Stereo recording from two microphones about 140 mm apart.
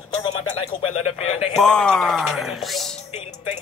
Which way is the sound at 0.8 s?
45° left (ahead or behind).